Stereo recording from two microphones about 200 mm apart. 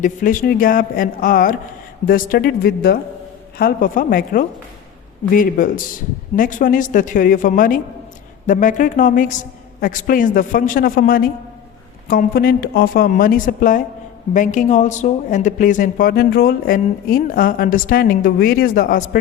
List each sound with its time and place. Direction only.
0.0 s a woman's voice: 40° left (ahead or behind)